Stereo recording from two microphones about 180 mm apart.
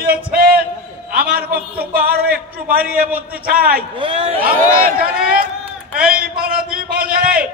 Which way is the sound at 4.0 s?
35° right (ahead or behind).